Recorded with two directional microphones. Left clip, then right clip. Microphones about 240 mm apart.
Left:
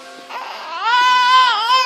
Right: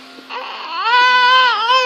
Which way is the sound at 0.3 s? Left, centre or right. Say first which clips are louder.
Right 2 dB; centre.